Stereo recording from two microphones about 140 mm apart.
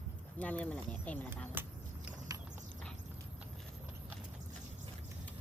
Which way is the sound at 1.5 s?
15° right (ahead or behind).